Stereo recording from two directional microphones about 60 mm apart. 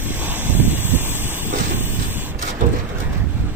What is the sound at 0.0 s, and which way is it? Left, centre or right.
Vehicle, right.